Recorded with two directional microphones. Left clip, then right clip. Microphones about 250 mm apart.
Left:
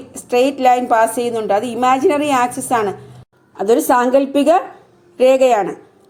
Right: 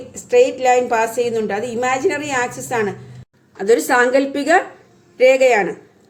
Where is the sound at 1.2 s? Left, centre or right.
Left.